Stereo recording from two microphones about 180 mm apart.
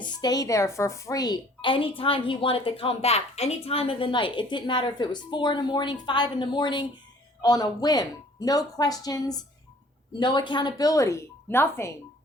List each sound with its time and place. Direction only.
0.0 s a woman's voice: 20° left (ahead or behind)